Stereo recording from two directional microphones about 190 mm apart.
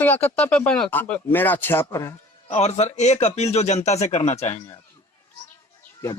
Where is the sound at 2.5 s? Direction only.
35° left (ahead or behind).